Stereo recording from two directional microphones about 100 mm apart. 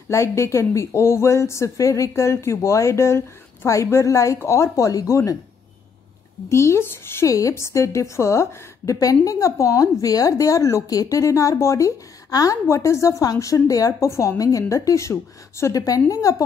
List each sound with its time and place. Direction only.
0.1 s speech: 30° left (ahead or behind)
6.5 s a woman's voice: 25° left (ahead or behind)